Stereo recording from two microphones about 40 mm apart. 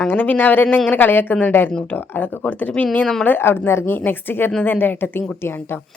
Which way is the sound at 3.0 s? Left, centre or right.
Centre.